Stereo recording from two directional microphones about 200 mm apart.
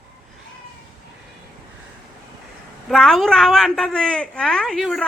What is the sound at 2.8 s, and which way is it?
A man's voice, centre (ahead or behind).